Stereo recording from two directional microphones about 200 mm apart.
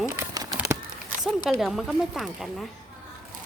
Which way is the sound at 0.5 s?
15° right (ahead or behind).